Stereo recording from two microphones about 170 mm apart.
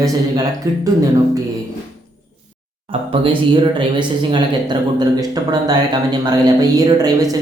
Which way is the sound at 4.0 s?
25° right (ahead or behind).